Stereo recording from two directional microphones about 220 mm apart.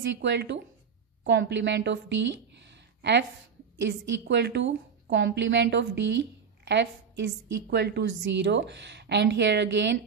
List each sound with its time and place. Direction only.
0.0 s a woman's voice: 55° right (ahead or behind)
2.6 s a sound: 50° right (ahead or behind)
3.8 s a woman's voice: 55° right (ahead or behind)